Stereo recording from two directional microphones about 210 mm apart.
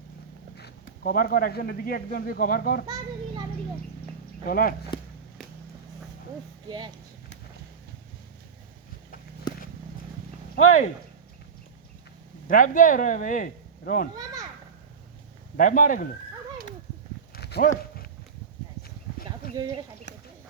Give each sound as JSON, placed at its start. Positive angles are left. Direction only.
{"t": 0.5, "sound": "speech", "side_deg": 50}
{"t": 2.8, "sound": "a child's voice", "side_deg": -20}
{"t": 4.4, "sound": "speech", "side_deg": 45}
{"t": 6.7, "sound": "speech", "side_deg": -20}
{"t": 9.5, "sound": "a sound", "side_deg": 20}
{"t": 10.5, "sound": "a sound", "side_deg": 35}
{"t": 12.5, "sound": "speech", "side_deg": 40}
{"t": 15.5, "sound": "speech", "side_deg": 40}
{"t": 17.3, "sound": "dog", "side_deg": 50}
{"t": 17.7, "sound": "horse", "side_deg": 45}
{"t": 19.5, "sound": "speech", "side_deg": -20}